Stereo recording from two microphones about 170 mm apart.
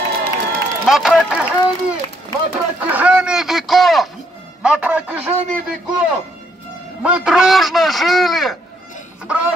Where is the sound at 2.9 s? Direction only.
10° right (ahead or behind).